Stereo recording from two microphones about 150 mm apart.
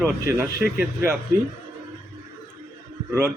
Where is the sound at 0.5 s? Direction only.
90° right.